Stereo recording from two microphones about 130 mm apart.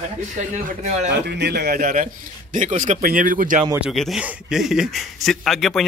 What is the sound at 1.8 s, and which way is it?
Speech, 90° right.